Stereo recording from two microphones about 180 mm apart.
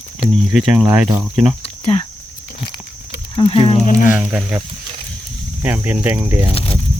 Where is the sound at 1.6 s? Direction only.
35° left (ahead or behind).